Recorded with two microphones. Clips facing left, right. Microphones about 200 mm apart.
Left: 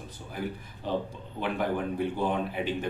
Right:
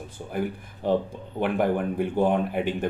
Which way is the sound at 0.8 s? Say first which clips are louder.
Right 7 dB; 55° right (ahead or behind).